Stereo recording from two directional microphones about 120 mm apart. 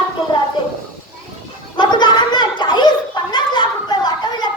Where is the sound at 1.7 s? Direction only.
40° left (ahead or behind).